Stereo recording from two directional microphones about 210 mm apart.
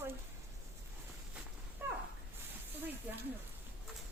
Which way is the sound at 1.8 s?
10° right (ahead or behind).